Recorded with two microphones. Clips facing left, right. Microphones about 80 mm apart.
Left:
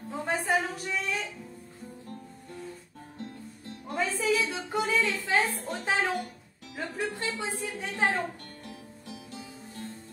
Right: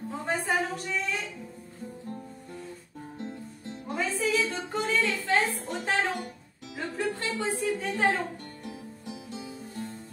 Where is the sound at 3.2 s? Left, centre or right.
Right.